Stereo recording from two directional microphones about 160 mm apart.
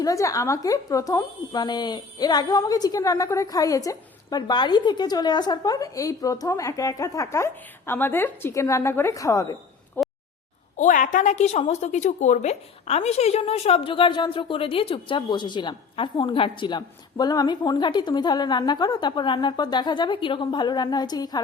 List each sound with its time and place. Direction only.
0.0 s a woman's voice: 20° left (ahead or behind)
10.0 s a sound: 15° left (ahead or behind)
10.8 s a woman's voice: 55° left (ahead or behind); by 21.4 s 25° left (ahead or behind)